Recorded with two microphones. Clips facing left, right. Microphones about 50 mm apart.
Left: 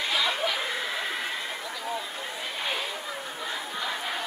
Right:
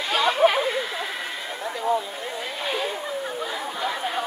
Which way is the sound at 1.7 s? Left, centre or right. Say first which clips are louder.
Right 14 dB; right.